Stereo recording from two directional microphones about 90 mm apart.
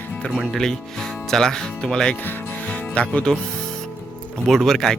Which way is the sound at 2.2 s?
15° left (ahead or behind).